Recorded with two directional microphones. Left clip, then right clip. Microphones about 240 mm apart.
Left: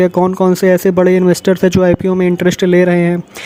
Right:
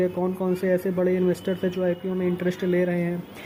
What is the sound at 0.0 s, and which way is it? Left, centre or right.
Speech, left.